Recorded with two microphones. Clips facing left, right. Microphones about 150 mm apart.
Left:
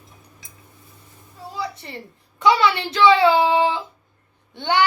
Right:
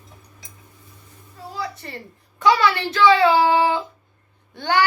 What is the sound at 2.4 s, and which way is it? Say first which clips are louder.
Child singing: even; 15° left (ahead or behind).